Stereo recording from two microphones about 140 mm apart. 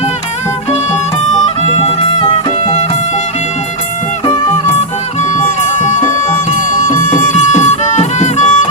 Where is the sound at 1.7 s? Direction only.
45° left (ahead or behind).